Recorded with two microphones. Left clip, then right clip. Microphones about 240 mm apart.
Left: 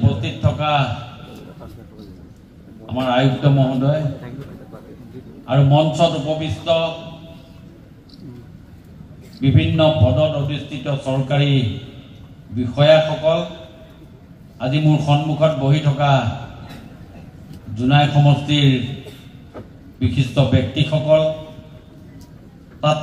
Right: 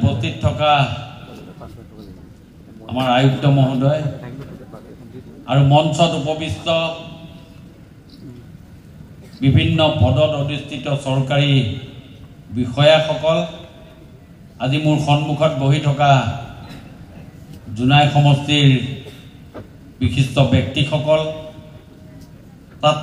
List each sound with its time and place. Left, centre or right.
0.0 s a sound: right
2.9 s a man's voice: right
5.5 s a man's voice: right
9.4 s a man's voice: right
12.5 s a man's voice: right
14.6 s a man's voice: right
17.7 s a man's voice: right
20.0 s a man's voice: right
22.8 s a man's voice: right